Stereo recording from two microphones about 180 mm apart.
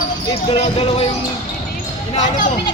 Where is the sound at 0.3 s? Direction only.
25° left (ahead or behind).